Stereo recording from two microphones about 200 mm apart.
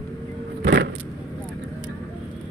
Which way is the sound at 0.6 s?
55° right (ahead or behind).